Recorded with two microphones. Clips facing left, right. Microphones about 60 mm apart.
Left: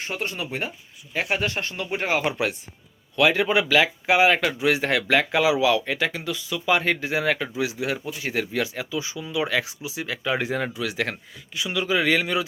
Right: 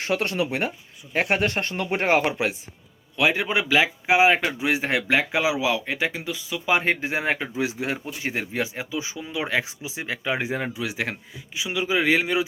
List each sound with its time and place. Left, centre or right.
0.0 s speech: right
1.1 s speech: right
2.3 s speech: right